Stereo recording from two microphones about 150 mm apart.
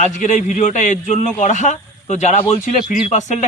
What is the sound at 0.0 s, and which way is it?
A man's voice, 55° left (ahead or behind).